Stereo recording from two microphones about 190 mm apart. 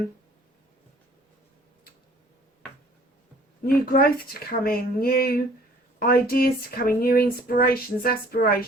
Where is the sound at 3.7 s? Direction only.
50° left (ahead or behind).